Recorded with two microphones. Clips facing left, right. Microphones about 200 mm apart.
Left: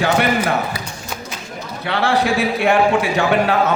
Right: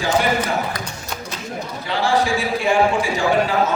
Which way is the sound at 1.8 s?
65° left (ahead or behind).